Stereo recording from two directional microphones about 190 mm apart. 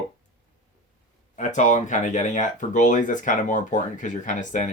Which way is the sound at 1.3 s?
40° left (ahead or behind).